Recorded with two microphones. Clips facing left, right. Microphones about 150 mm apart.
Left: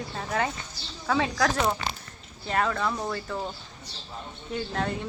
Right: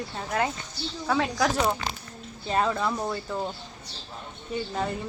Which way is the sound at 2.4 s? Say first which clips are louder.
Right 1 dB; 20° right (ahead or behind).